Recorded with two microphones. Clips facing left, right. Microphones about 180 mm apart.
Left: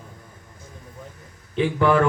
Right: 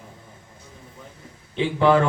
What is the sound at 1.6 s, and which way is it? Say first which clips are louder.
Speech: right 1 dB; 20° right (ahead or behind).